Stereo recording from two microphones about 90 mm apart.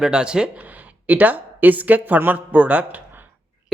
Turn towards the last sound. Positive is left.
turn(degrees=-20)  # may be behind; listen again after turning